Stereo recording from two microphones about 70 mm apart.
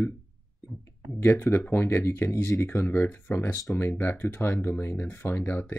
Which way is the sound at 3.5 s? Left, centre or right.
Left.